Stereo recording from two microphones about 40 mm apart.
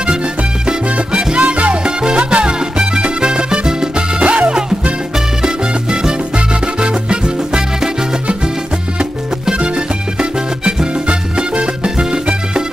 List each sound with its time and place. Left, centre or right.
0.0 s music: right
9.6 s music: right